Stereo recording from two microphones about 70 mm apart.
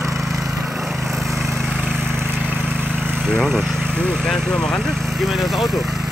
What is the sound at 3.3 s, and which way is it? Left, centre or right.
Speech, centre.